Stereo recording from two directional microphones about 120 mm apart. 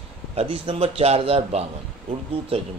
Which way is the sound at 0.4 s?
55° right (ahead or behind).